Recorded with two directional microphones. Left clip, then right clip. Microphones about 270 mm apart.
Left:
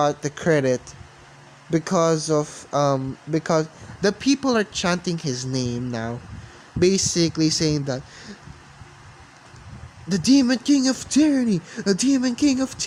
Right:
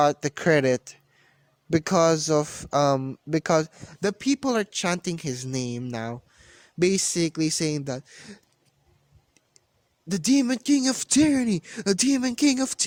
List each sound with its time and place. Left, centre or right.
0.0 s speech: right
10.1 s speech: right